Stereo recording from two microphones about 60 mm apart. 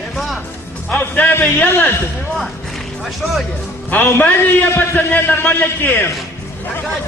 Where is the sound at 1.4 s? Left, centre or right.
Left.